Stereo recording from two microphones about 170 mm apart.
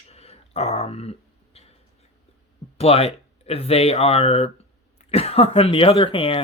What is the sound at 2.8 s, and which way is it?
Speech, 35° left (ahead or behind).